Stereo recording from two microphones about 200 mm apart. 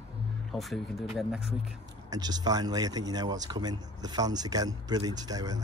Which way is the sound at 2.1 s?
20° right (ahead or behind).